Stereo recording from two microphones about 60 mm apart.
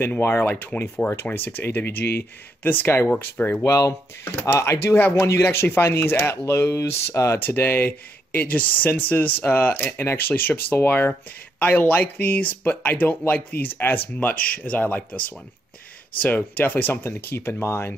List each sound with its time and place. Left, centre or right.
0.2 s speech: left
3.6 s speech: left
5.1 s speech: left
7.3 s speech: left
17.0 s speech: left